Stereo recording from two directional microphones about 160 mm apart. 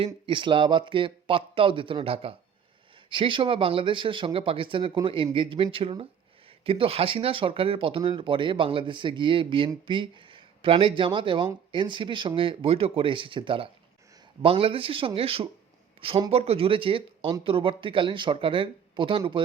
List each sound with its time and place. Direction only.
0.0 s speech: 30° right (ahead or behind)